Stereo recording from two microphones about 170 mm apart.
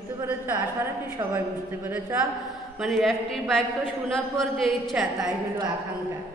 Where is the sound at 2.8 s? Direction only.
Centre (ahead or behind).